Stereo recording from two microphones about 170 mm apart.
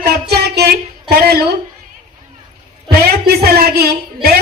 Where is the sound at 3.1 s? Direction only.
65° right (ahead or behind).